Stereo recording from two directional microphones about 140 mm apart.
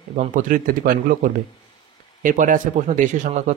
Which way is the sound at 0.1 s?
65° right (ahead or behind).